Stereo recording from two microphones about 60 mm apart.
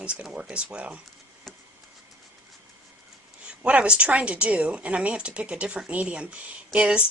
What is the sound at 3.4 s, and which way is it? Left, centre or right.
Speech, centre.